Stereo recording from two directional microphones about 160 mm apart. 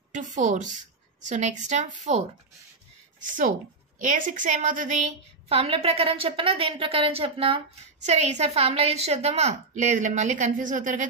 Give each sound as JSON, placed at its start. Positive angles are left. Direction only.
{"t": 0.1, "sound": "a woman's voice", "side_deg": -50}
{"t": 4.0, "sound": "a woman's voice", "side_deg": -55}